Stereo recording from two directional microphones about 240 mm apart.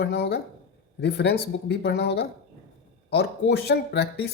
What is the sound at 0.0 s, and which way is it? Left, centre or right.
Speech, left.